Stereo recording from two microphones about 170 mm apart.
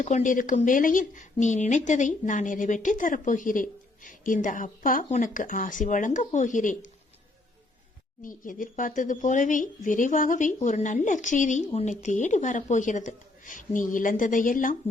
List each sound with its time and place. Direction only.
0.0 s speech: 45° left (ahead or behind)
8.2 s speech: 50° left (ahead or behind)